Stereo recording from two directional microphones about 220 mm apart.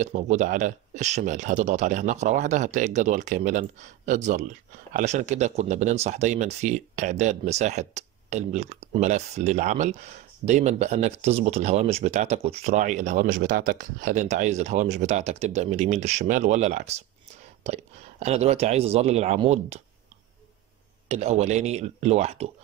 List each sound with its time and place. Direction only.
0.0 s speech: 35° right (ahead or behind)
18.2 s speech: 30° right (ahead or behind)
21.1 s speech: 30° right (ahead or behind)